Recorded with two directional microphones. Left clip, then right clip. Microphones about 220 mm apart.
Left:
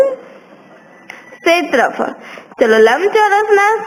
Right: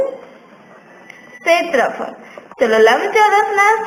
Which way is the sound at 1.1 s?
50° left (ahead or behind).